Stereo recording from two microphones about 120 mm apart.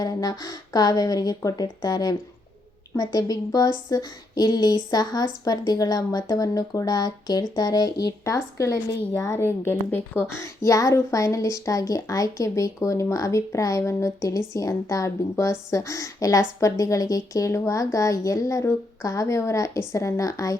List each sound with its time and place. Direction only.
0.0 s a woman's voice: 30° left (ahead or behind)